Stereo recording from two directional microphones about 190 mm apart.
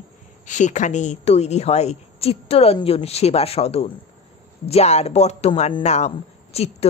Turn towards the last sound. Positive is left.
turn(degrees=35)  # may be behind; listen again after turning